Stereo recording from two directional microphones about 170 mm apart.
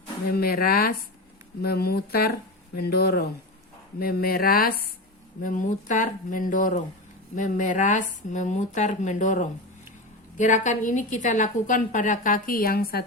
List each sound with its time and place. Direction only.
0.3 s a woman's voice: 65° left (ahead or behind)